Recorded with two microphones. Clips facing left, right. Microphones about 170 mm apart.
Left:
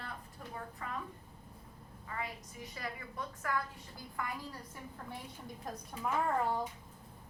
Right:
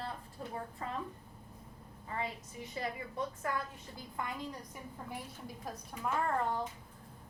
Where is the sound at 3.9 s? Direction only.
20° right (ahead or behind).